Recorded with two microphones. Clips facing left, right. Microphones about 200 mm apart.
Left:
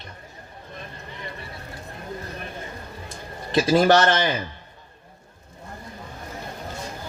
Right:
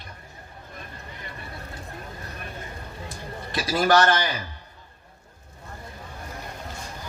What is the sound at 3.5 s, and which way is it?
Speech, 25° left (ahead or behind).